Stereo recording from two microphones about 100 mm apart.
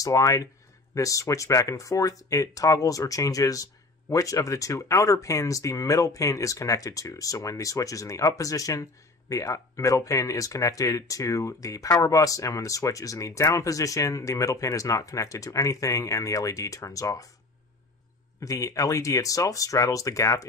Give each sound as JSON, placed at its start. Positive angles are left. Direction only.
{"t": 0.0, "sound": "speech", "side_deg": 35}
{"t": 18.4, "sound": "speech", "side_deg": 35}